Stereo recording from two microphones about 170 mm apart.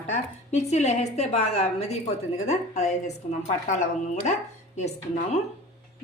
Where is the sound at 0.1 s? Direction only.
40° left (ahead or behind).